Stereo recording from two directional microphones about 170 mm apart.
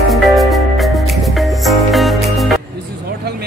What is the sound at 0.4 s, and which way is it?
Music, centre (ahead or behind).